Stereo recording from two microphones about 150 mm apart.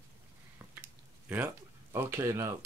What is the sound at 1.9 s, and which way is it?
Speech, 15° right (ahead or behind).